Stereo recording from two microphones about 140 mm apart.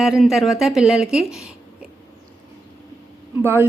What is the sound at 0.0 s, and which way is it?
Speech, centre (ahead or behind).